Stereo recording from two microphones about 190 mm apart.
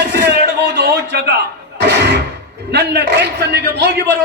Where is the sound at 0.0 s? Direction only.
60° right (ahead or behind).